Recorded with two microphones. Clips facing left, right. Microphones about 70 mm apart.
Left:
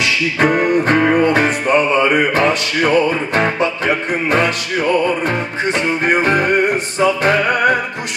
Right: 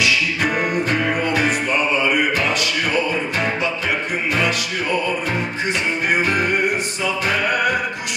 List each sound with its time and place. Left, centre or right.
0.0 s music: left